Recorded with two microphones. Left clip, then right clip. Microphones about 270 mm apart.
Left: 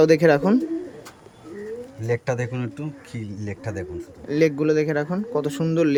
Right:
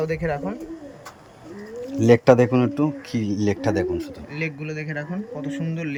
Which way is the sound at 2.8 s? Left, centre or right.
Right.